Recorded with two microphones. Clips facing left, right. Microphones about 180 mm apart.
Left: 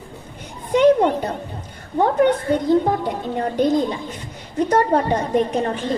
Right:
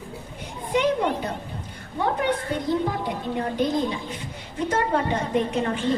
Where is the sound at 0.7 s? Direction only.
45° left (ahead or behind).